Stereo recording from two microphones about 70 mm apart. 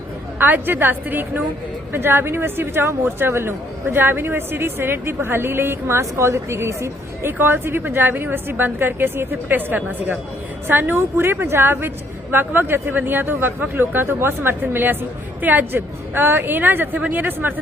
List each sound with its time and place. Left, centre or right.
0.3 s a woman's voice: right